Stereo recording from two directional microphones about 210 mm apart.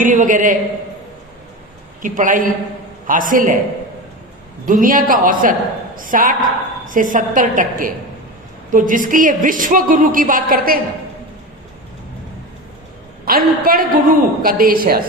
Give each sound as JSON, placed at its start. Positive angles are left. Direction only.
{"t": 0.0, "sound": "a woman's voice", "side_deg": -40}
{"t": 2.0, "sound": "a woman's voice", "side_deg": -40}
{"t": 4.6, "sound": "a woman's voice", "side_deg": -40}
{"t": 13.2, "sound": "a woman's voice", "side_deg": -45}